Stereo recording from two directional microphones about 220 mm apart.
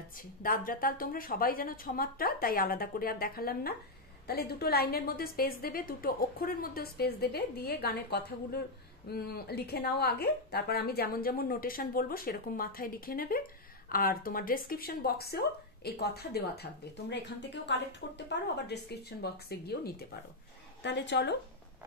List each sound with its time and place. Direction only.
0.1 s a woman's voice: 40° left (ahead or behind)
17.6 s a woman's voice: 50° left (ahead or behind)